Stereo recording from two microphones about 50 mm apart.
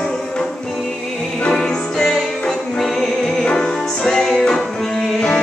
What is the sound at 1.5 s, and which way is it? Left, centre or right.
Music, centre.